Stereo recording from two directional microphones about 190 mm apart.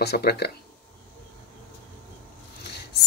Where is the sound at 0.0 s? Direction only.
60° left (ahead or behind).